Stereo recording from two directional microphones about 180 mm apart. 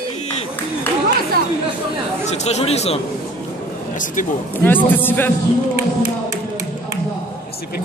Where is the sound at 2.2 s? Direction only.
40° left (ahead or behind).